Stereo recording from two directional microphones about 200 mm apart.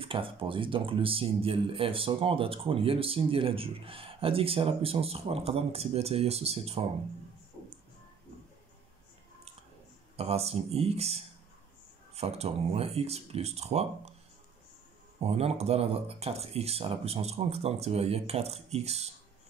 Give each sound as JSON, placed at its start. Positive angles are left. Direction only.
{"t": 0.0, "sound": "speech", "side_deg": -25}
{"t": 10.1, "sound": "speech", "side_deg": -30}
{"t": 15.1, "sound": "speech", "side_deg": -30}